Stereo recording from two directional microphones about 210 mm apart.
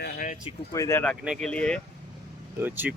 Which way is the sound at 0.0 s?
45° left (ahead or behind).